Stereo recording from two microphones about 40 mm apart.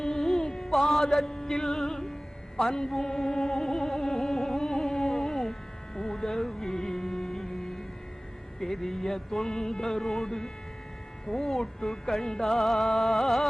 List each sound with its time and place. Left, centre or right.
0.0 s music: centre
11.3 s speech: centre